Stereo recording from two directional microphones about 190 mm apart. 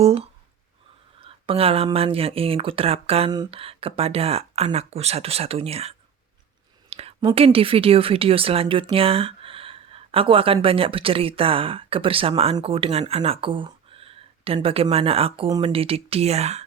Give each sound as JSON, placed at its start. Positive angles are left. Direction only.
{"t": 0.0, "sound": "speech", "side_deg": -30}
{"t": 6.9, "sound": "a sound", "side_deg": -30}
{"t": 7.3, "sound": "speech", "side_deg": -30}